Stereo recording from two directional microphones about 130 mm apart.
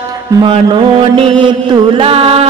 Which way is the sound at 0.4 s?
35° right (ahead or behind).